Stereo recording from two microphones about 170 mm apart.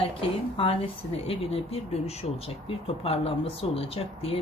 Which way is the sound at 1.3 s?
35° left (ahead or behind).